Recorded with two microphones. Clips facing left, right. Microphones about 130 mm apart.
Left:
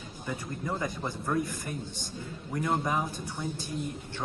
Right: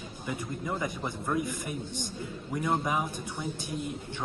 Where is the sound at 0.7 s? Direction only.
20° right (ahead or behind).